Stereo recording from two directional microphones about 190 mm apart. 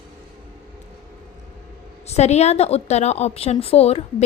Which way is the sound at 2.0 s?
35° left (ahead or behind).